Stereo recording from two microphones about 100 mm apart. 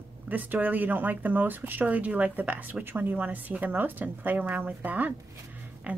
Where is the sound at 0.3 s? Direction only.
15° right (ahead or behind).